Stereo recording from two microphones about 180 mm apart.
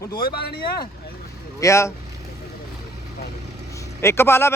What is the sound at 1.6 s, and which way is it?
Speech, 15° left (ahead or behind).